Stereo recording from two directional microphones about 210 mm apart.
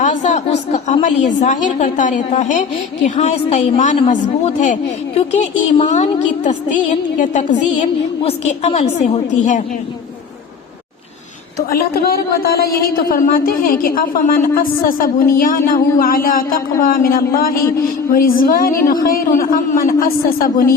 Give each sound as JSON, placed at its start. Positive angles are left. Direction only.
{"t": 0.0, "sound": "a woman's voice", "side_deg": 35}
{"t": 11.7, "sound": "speech", "side_deg": 45}